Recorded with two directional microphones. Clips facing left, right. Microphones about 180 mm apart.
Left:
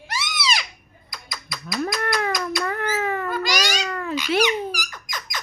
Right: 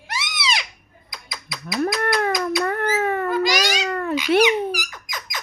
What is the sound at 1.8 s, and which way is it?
Cat, 50° right (ahead or behind).